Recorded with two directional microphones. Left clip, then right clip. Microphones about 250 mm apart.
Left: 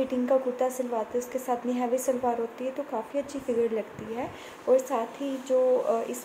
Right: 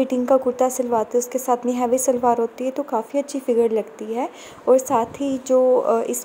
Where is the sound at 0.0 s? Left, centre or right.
Right.